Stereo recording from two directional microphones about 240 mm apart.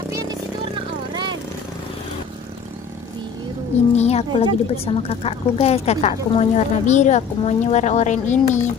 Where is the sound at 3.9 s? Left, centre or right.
Left.